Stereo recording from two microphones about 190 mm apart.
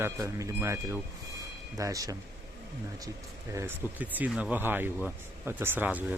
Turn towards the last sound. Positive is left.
turn(degrees=-10)  # may be behind; listen again after turning